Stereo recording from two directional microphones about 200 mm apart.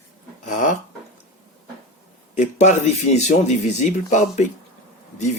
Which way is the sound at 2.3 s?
35° left (ahead or behind).